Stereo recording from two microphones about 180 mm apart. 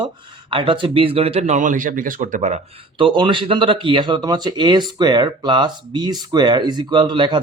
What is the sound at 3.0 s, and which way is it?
A man's voice, 25° right (ahead or behind).